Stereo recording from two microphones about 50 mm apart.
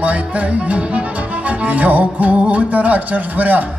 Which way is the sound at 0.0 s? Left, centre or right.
Right.